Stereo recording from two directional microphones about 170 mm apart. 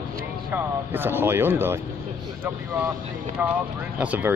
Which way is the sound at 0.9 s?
10° right (ahead or behind).